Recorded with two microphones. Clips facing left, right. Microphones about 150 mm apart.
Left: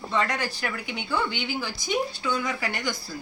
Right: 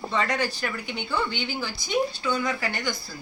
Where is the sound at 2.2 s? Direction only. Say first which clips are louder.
Right 1 dB; 15° left (ahead or behind).